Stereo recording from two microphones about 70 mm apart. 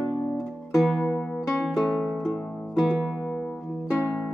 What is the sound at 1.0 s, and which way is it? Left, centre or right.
Music, centre.